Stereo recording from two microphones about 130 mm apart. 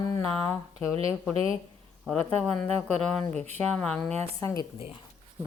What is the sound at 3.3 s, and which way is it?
Speech, 55° right (ahead or behind).